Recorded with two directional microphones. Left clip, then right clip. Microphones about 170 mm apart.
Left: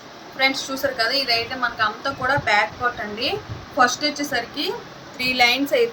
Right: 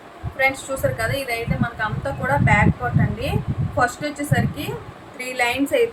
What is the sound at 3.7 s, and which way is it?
Speech, 10° right (ahead or behind).